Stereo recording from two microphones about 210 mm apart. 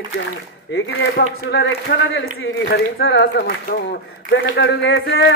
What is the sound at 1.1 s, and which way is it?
Speech, 55° left (ahead or behind).